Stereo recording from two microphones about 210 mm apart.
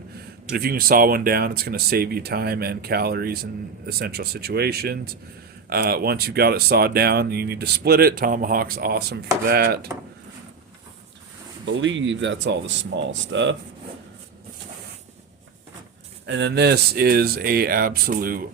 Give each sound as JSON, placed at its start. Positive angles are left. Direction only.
{"t": 0.4, "sound": "speech", "side_deg": -45}
{"t": 11.6, "sound": "speech", "side_deg": -65}
{"t": 16.2, "sound": "speech", "side_deg": -55}